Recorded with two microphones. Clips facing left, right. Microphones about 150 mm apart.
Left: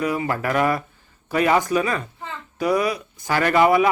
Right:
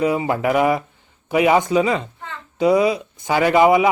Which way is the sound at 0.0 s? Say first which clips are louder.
Right 4 dB; 20° right (ahead or behind).